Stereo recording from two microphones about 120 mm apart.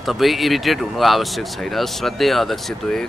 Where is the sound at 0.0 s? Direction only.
Centre (ahead or behind).